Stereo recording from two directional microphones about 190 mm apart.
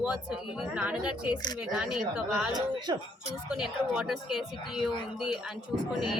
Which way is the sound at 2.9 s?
20° right (ahead or behind).